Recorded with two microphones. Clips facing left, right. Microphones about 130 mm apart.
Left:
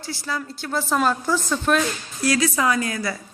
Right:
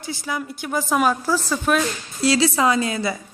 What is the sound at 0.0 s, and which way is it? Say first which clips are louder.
A woman's voice: right 1 dB; 20° right (ahead or behind).